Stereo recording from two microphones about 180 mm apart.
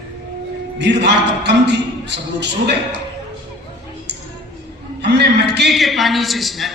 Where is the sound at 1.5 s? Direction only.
70° right (ahead or behind).